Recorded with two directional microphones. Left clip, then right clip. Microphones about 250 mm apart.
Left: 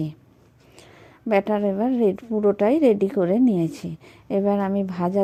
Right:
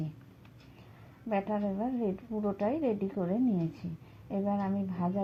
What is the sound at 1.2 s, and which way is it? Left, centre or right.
A woman's voice, left.